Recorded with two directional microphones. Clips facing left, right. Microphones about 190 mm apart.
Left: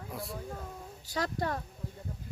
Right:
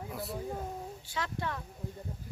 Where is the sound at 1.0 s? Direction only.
40° left (ahead or behind).